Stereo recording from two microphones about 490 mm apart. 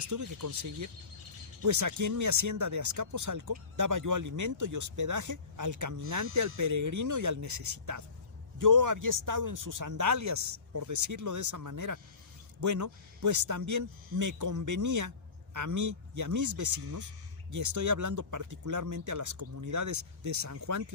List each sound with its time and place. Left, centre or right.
0.0 s speech: right